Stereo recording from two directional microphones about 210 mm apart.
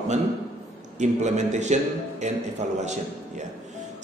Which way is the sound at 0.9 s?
35° right (ahead or behind).